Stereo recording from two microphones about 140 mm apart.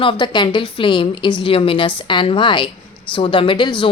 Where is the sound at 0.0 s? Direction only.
35° left (ahead or behind).